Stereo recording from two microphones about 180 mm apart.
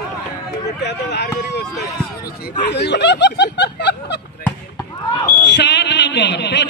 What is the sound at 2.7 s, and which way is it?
Speech, 70° left (ahead or behind).